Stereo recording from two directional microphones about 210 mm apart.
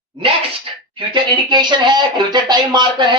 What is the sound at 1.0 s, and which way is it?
Speech, 20° right (ahead or behind).